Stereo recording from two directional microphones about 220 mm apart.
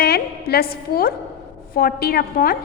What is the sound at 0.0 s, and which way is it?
A woman's voice, 45° left (ahead or behind).